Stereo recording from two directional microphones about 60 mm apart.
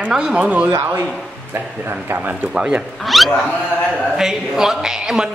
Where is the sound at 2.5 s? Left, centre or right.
Centre.